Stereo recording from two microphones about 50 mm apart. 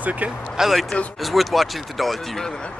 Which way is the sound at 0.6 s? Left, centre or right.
Centre.